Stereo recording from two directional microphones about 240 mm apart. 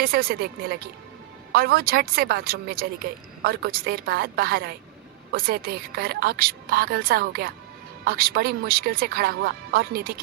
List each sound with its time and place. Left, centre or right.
0.0 s speech: right